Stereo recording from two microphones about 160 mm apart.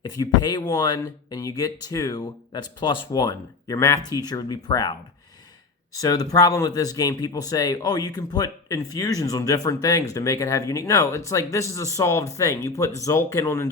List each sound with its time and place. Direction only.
0.0 s speech: 25° left (ahead or behind)
6.0 s speech: 25° left (ahead or behind)